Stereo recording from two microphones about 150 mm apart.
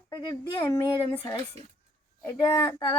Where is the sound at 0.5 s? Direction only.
35° left (ahead or behind).